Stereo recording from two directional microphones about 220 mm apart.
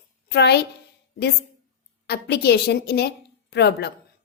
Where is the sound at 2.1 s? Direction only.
50° left (ahead or behind).